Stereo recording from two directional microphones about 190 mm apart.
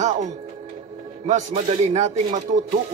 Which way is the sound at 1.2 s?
35° right (ahead or behind).